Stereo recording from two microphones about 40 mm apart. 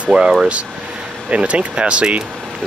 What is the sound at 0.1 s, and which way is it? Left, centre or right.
Speech, centre.